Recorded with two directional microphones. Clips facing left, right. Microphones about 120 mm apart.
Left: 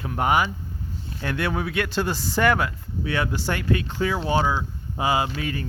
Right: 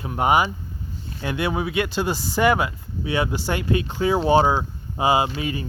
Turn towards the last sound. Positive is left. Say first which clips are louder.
# right 3 dB
turn(degrees=-15)  # may be behind; listen again after turning